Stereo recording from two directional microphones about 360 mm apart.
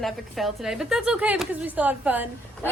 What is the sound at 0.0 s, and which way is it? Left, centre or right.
A woman's voice, centre.